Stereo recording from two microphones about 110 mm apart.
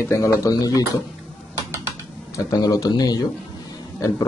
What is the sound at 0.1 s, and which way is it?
Speech, 30° left (ahead or behind).